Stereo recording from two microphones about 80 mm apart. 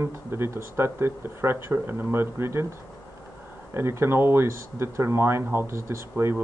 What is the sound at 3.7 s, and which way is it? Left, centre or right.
Speech, right.